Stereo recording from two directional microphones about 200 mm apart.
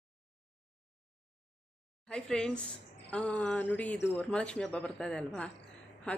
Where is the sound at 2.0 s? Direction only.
5° left (ahead or behind).